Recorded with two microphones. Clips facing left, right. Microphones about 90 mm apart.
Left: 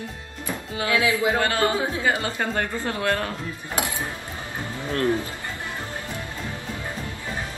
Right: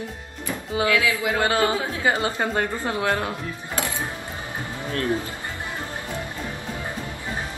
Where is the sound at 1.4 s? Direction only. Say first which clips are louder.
Right 1 dB; 20° right (ahead or behind).